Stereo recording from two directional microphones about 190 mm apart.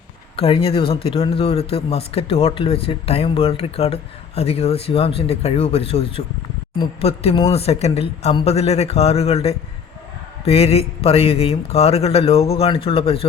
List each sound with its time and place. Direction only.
0.3 s speech: 30° left (ahead or behind)